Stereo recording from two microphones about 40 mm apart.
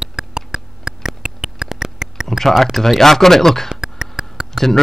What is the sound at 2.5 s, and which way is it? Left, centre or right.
Speech, centre.